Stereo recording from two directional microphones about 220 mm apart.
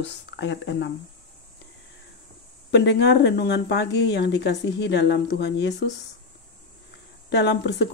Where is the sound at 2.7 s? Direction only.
50° left (ahead or behind).